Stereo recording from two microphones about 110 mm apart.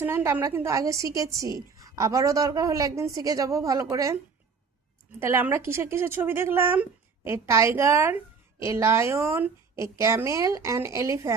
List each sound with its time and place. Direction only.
0.0 s a woman's voice: 20° right (ahead or behind)
5.2 s a woman's voice: 20° right (ahead or behind)